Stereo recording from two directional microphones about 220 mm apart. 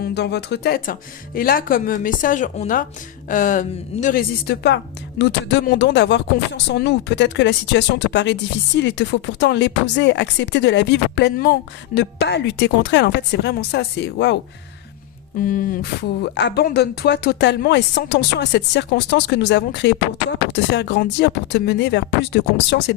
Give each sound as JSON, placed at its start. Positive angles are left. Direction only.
{"t": 0.0, "sound": "a woman's voice", "side_deg": 50}
{"t": 15.4, "sound": "a woman's voice", "side_deg": 40}